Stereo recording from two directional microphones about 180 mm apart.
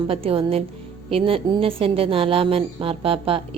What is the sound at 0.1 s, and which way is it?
Speech, 30° right (ahead or behind).